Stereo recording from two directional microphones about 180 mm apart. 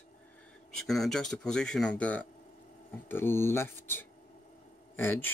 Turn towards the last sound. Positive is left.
turn(degrees=10)  # may be behind; listen again after turning